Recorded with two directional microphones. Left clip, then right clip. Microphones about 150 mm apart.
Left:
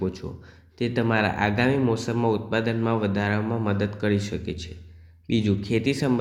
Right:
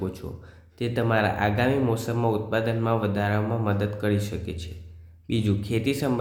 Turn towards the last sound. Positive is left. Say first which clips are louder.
# left 2 dB
turn(degrees=5)  # may be behind; listen again after turning